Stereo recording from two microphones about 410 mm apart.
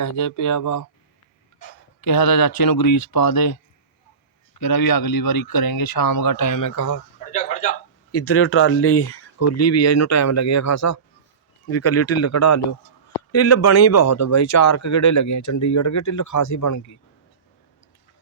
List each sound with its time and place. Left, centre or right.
0.0 s speech: left
2.0 s speech: left
8.1 s speech: left